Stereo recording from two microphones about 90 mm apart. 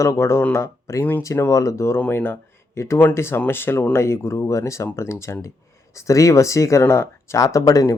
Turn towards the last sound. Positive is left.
turn(degrees=40)  # may be behind; listen again after turning